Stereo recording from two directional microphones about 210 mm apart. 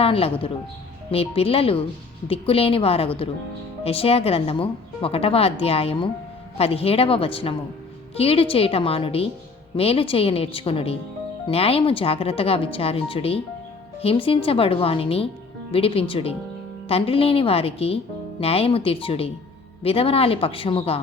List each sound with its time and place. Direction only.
0.0 s speech: 25° left (ahead or behind)